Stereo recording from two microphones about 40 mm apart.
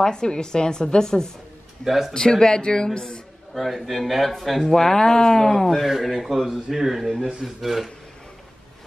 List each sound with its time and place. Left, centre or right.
0.0 s a woman's voice: centre
1.9 s a man's voice: centre
2.1 s speech: centre
3.5 s a man's voice: centre